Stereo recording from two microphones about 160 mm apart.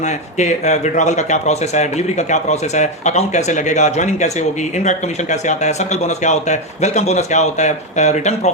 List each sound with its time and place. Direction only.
0.3 s speech: 45° left (ahead or behind)